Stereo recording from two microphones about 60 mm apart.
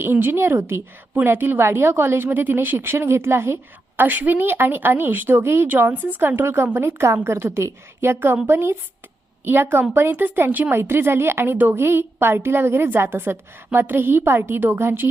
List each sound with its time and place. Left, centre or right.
0.0 s a woman's voice: right
4.0 s a woman's voice: right